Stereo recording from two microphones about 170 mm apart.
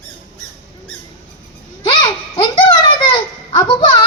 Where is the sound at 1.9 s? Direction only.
25° left (ahead or behind).